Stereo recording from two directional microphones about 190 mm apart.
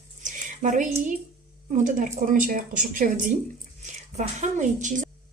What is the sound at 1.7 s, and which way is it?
A woman's voice, 40° right (ahead or behind).